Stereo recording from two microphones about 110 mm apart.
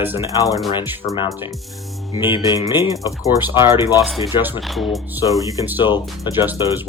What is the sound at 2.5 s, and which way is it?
Speech, 40° left (ahead or behind).